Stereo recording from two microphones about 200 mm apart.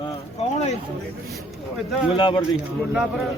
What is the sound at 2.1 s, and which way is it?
Speech, 25° left (ahead or behind).